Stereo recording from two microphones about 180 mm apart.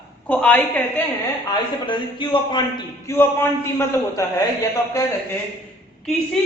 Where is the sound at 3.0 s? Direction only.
10° left (ahead or behind).